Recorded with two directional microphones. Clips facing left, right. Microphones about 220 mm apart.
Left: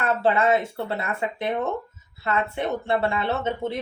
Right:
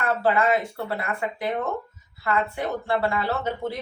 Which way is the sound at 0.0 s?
25° left (ahead or behind).